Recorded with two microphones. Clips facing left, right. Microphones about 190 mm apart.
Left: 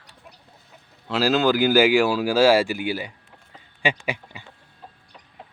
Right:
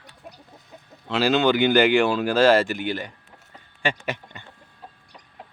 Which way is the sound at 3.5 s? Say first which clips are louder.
Left 1 dB; 15° left (ahead or behind).